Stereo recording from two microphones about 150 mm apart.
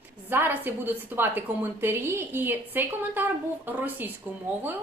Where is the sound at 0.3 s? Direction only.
15° right (ahead or behind).